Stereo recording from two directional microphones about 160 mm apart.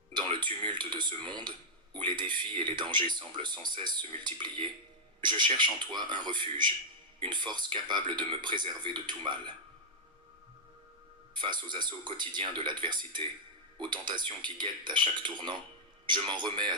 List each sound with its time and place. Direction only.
0.1 s speech: 30° right (ahead or behind)
11.3 s speech: 30° right (ahead or behind)